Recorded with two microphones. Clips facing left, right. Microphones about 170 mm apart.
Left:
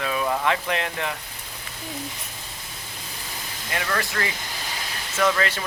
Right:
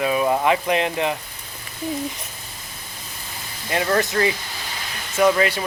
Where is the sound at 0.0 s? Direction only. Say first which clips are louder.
Right 5 dB; 20° right (ahead or behind).